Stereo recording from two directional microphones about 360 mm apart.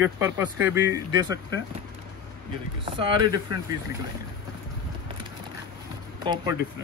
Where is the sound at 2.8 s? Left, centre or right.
Centre.